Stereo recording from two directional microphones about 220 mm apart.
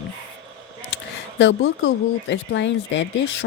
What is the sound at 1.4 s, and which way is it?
Speech, 55° left (ahead or behind).